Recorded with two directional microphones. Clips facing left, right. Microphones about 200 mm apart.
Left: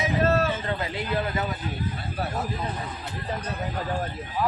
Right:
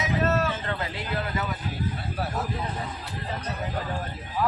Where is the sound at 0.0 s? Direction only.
35° left (ahead or behind).